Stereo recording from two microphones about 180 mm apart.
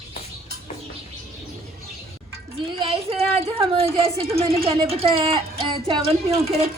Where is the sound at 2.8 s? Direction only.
30° right (ahead or behind).